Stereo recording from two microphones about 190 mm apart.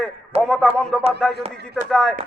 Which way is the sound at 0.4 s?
5° left (ahead or behind).